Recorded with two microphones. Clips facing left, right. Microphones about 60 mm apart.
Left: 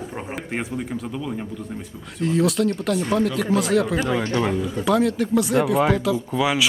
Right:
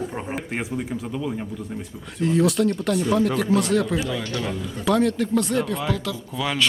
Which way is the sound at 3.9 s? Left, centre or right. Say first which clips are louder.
Left 3 dB; left.